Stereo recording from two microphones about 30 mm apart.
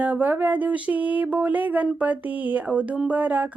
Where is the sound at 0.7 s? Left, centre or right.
Right.